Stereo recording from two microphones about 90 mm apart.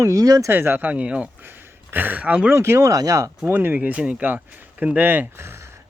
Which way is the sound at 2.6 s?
35° right (ahead or behind).